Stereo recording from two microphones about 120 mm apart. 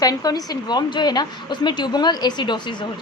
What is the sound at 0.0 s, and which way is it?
A woman's voice, 30° left (ahead or behind).